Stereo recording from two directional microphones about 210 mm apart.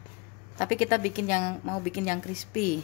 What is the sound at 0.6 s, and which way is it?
Speech, 40° left (ahead or behind).